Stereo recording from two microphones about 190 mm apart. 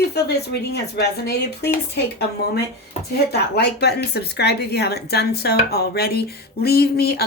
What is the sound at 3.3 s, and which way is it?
Speech, 60° left (ahead or behind).